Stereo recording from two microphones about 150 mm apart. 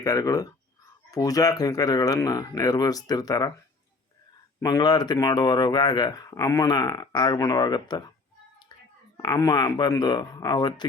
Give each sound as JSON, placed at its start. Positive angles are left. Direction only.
{"t": 0.0, "sound": "speech", "side_deg": 25}
{"t": 4.6, "sound": "speech", "side_deg": 25}
{"t": 8.7, "sound": "whispering", "side_deg": 30}
{"t": 9.1, "sound": "speech", "side_deg": 25}